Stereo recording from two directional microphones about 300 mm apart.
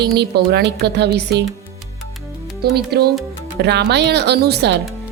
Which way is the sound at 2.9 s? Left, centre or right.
Right.